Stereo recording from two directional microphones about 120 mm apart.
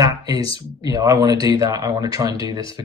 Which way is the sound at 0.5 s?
30° right (ahead or behind).